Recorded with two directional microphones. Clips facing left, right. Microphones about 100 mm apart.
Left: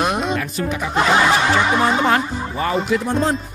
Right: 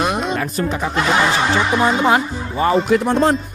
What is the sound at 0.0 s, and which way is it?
Music, centre (ahead or behind).